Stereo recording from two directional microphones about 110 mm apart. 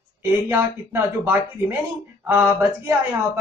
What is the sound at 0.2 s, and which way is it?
Speech, 25° right (ahead or behind).